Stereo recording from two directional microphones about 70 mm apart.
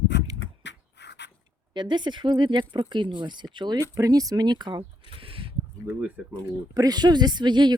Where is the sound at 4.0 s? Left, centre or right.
Right.